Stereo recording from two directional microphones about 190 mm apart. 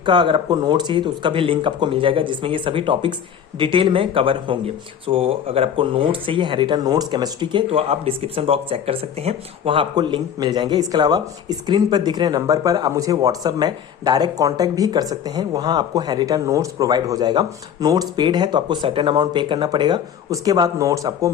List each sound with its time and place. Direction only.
0.0 s speech: 25° right (ahead or behind)